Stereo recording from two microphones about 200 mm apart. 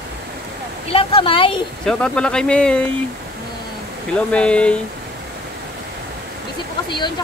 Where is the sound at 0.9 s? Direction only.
25° left (ahead or behind).